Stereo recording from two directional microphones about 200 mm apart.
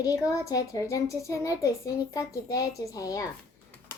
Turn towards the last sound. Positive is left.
turn(degrees=15)  # may be behind; listen again after turning